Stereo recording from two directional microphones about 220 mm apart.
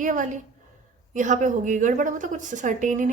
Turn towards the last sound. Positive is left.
turn(degrees=-35)  # may be behind; listen again after turning